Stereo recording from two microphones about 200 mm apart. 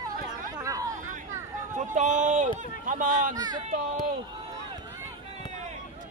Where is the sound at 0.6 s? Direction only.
15° right (ahead or behind).